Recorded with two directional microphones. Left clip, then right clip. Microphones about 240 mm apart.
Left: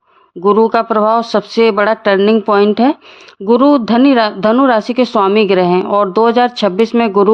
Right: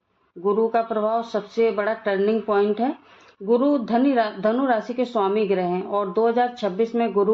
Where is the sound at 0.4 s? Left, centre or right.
Left.